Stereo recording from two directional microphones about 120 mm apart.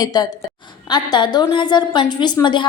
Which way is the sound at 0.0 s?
30° left (ahead or behind).